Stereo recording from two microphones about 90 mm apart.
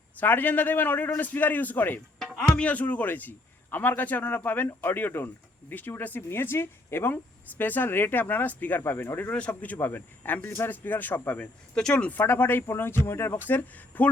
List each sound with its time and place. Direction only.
0.2 s speech: 20° left (ahead or behind)
2.1 s speech: 5° left (ahead or behind)